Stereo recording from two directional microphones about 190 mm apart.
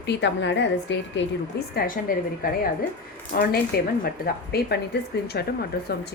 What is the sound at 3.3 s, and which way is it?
Speech, 50° left (ahead or behind).